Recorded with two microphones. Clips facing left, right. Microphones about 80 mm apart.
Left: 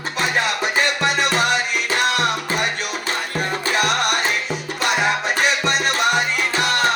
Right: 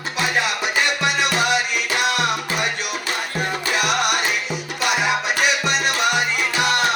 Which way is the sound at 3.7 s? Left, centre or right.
Left.